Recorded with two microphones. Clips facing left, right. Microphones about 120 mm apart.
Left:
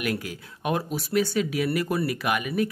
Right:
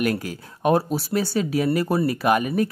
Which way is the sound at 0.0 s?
40° right (ahead or behind).